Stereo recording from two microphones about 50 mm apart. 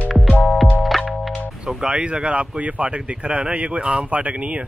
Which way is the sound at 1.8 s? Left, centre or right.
Right.